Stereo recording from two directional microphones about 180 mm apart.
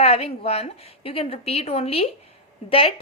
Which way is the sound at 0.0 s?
35° left (ahead or behind).